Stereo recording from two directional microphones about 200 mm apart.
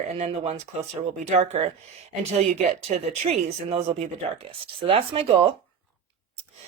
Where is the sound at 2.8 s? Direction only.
30° right (ahead or behind).